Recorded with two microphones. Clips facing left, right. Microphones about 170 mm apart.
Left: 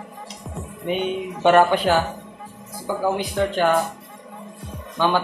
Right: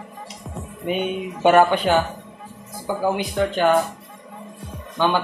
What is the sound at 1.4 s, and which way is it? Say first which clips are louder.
Speech: even; 5° right (ahead or behind).